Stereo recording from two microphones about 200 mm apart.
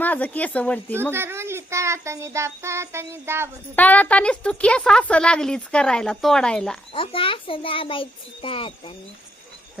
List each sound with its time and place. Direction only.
0.0 s speech: 10° left (ahead or behind)
1.1 s child singing: 10° right (ahead or behind)
3.8 s a woman's voice: 10° left (ahead or behind)
6.9 s a child's voice: 25° left (ahead or behind)